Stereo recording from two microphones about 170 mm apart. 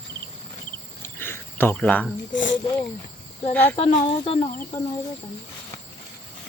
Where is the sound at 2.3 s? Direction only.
90° left.